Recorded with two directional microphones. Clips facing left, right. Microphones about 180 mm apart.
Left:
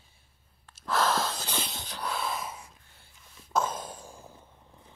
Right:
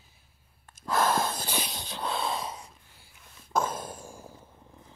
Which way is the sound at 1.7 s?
20° right (ahead or behind).